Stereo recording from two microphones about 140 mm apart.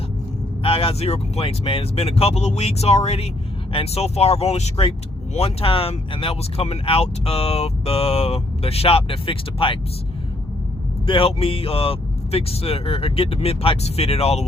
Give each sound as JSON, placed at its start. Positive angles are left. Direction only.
{"t": 0.6, "sound": "speech", "side_deg": 40}
{"t": 11.0, "sound": "speech", "side_deg": 40}